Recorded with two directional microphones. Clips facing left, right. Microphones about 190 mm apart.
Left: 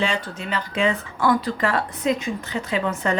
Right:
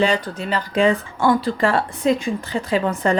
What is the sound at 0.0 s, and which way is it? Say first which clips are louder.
A woman's voice: right 5 dB; 35° right (ahead or behind).